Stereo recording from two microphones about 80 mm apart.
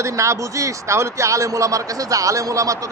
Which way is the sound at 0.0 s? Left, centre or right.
Right.